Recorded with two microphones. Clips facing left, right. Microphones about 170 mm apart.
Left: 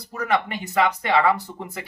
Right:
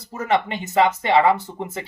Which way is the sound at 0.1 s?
25° right (ahead or behind).